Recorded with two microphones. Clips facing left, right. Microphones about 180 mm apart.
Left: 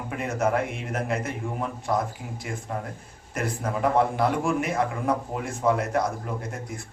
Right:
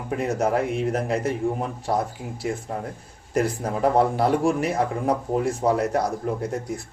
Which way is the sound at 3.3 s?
35° right (ahead or behind).